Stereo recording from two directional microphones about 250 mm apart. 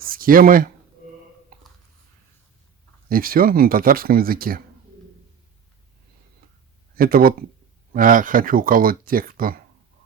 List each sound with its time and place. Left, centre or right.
0.0 s speech: right
1.5 s a sound: right
3.1 s speech: right
6.9 s speech: right